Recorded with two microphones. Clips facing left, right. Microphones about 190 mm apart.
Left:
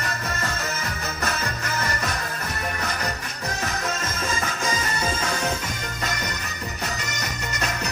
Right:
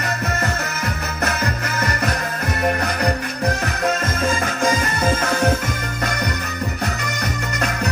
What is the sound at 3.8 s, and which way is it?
Music, 55° right (ahead or behind).